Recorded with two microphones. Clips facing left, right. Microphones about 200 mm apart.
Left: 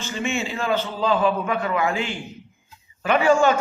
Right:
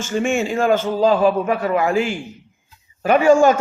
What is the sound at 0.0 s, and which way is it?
Mantra, 50° right (ahead or behind).